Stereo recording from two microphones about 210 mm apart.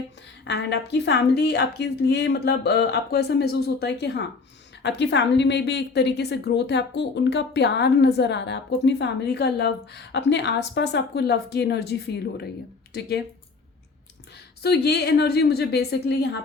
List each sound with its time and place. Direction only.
0.4 s a woman's voice: 55° left (ahead or behind)
14.6 s a woman's voice: 50° left (ahead or behind)